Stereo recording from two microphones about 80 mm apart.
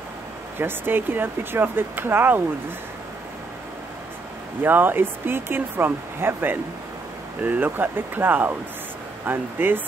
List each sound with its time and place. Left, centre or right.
0.6 s speech: right
4.6 s speech: right